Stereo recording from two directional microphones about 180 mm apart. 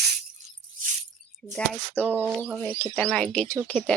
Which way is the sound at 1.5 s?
10° left (ahead or behind).